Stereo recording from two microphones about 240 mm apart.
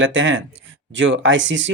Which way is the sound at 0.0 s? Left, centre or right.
Right.